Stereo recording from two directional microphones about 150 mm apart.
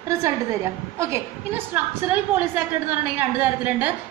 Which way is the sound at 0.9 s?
15° right (ahead or behind).